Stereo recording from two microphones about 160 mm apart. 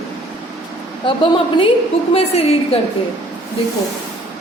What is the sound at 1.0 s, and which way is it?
A woman's voice, 30° left (ahead or behind).